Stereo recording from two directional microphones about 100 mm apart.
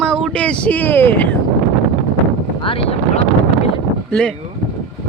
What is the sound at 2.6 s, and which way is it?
Speech, 75° left (ahead or behind).